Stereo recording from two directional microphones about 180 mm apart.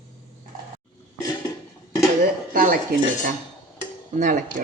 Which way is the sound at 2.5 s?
50° right (ahead or behind).